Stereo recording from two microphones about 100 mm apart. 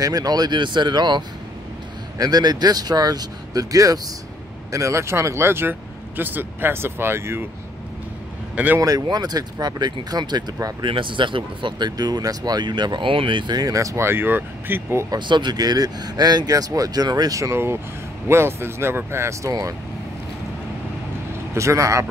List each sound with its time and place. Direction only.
0.0 s speech: 40° right (ahead or behind)
8.7 s speech: 35° right (ahead or behind); by 15.0 s 20° right (ahead or behind)
15.0 s speech: 50° right (ahead or behind); by 19.5 s 25° right (ahead or behind)
21.5 s speech: 30° right (ahead or behind)